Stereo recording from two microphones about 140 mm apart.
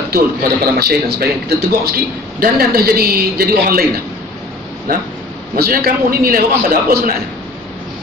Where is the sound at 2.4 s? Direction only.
90° right.